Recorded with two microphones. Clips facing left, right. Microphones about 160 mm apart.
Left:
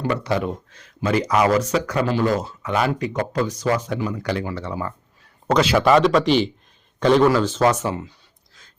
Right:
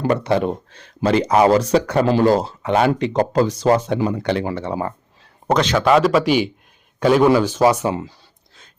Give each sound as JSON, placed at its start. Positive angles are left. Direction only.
{"t": 0.2, "sound": "speech", "side_deg": -25}
{"t": 5.5, "sound": "a man's voice", "side_deg": 5}
{"t": 5.9, "sound": "a man's voice", "side_deg": -5}